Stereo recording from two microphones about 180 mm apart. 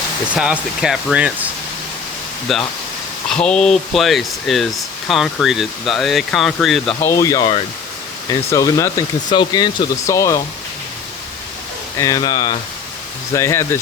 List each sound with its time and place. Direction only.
0.3 s speech: 5° right (ahead or behind)
2.5 s speech: centre (ahead or behind)
7.0 s speech: 15° left (ahead or behind)
11.9 s speech: 20° left (ahead or behind)